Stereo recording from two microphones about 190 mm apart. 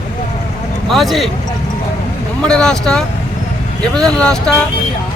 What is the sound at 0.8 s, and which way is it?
Speech, centre (ahead or behind).